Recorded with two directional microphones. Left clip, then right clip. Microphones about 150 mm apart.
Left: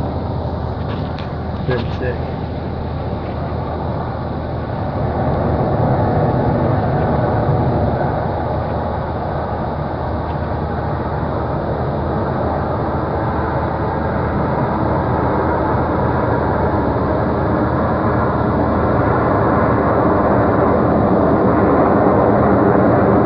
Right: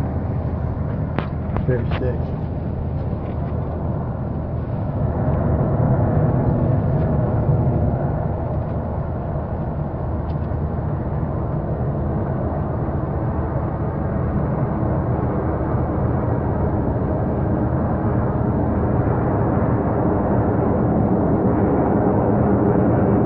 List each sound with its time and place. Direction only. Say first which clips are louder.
18.9 s vehicle: left 7 dB; 25° left (ahead or behind)